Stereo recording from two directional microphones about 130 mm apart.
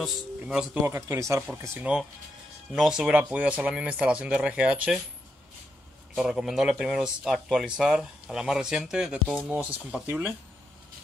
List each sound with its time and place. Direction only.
0.0 s speech: 5° right (ahead or behind)
0.8 s speech: 20° right (ahead or behind)
2.7 s speech: 5° right (ahead or behind)
6.1 s speech: 5° right (ahead or behind)